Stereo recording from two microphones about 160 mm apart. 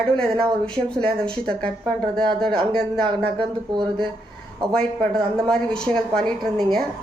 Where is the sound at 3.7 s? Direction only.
30° right (ahead or behind).